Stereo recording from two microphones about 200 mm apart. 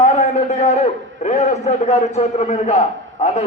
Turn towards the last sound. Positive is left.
turn(degrees=35)  # may be behind; listen again after turning